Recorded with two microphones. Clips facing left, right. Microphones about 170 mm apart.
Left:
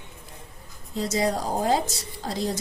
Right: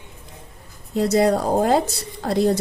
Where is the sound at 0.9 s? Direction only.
60° right (ahead or behind).